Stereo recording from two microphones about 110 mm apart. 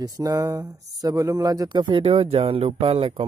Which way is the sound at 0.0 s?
35° right (ahead or behind).